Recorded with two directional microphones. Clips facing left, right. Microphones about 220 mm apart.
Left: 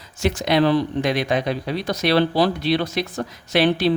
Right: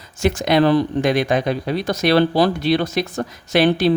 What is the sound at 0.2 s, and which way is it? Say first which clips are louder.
Speech: right 3 dB; 50° right (ahead or behind).